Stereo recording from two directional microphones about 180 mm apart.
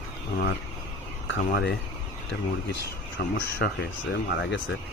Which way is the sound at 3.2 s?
55° left (ahead or behind).